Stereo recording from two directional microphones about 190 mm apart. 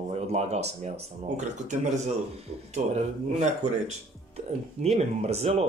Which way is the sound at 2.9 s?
35° right (ahead or behind).